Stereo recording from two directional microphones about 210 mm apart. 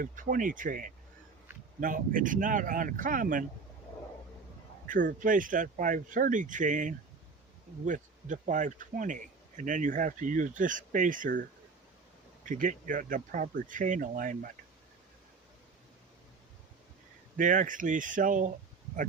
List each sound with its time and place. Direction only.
0.0 s a man's voice: 40° right (ahead or behind)
4.9 s a man's voice: 40° right (ahead or behind)
12.5 s a man's voice: 40° right (ahead or behind)
17.3 s a man's voice: 40° right (ahead or behind)